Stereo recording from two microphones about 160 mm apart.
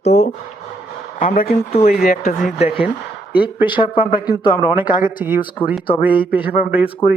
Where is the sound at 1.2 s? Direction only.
60° left (ahead or behind).